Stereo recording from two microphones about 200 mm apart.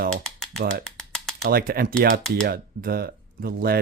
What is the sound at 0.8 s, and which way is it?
Rattle, 5° left (ahead or behind).